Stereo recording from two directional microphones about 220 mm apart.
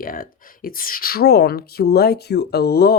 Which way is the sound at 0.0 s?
40° left (ahead or behind).